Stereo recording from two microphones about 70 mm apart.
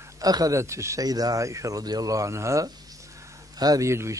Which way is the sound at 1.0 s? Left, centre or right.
Right.